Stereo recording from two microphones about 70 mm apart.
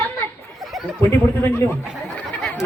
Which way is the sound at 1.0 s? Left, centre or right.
Left.